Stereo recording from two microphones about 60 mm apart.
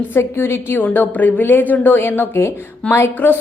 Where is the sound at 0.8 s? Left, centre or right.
Left.